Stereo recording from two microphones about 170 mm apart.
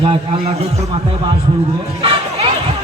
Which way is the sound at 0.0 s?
30° right (ahead or behind).